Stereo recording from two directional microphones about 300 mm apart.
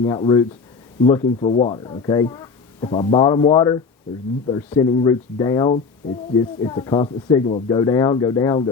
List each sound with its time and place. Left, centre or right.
0.0 s speech: centre